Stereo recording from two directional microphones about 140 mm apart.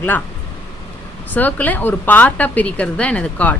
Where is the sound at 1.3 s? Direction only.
10° left (ahead or behind).